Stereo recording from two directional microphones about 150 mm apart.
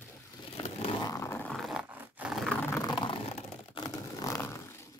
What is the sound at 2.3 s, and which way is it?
Roar, centre (ahead or behind).